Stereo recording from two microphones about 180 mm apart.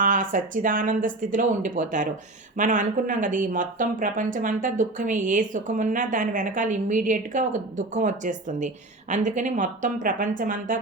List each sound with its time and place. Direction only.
0.0 s a woman's voice: 45° right (ahead or behind)